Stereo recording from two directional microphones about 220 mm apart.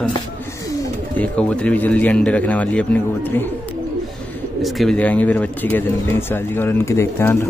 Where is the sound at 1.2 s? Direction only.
5° left (ahead or behind).